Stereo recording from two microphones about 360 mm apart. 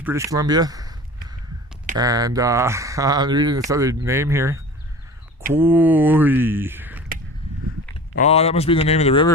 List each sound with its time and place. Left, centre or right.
0.0 s a sound: centre
2.0 s speech: centre
8.2 s a man's voice: centre